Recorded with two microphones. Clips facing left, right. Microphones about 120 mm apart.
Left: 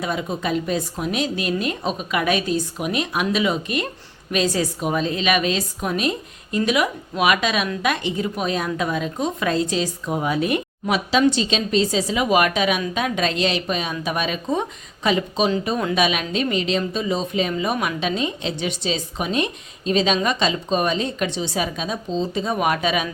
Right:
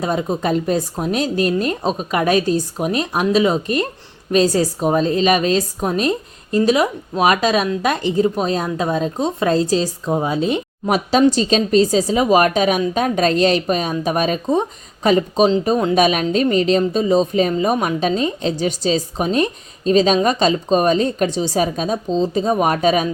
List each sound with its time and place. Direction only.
0.0 s speech: 40° right (ahead or behind)
10.8 s a woman's voice: 45° right (ahead or behind)